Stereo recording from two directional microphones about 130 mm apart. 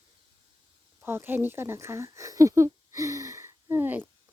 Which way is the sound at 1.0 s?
20° right (ahead or behind).